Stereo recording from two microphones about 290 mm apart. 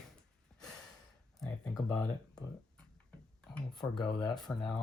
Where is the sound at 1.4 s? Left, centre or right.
Centre.